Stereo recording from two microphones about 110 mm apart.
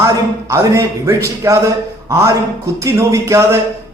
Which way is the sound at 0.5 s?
25° right (ahead or behind).